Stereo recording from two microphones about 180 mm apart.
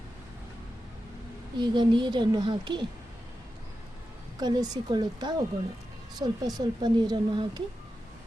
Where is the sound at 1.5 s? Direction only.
25° right (ahead or behind).